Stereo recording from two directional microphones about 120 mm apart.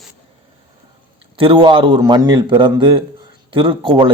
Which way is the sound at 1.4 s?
45° right (ahead or behind).